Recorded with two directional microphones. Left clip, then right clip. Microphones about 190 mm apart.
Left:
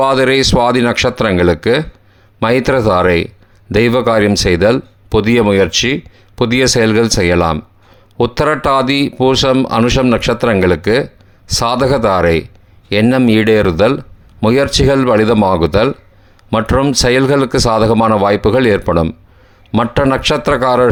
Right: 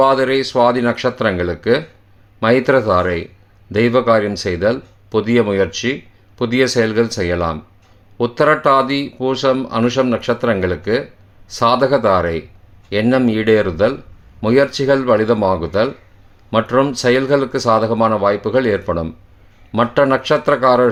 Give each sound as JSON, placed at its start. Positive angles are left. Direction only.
{"t": 0.0, "sound": "speech", "side_deg": 35}